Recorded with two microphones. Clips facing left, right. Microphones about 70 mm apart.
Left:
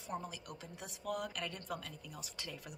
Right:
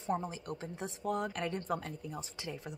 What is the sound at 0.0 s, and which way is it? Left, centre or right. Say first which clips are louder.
Speech: right 8 dB; right.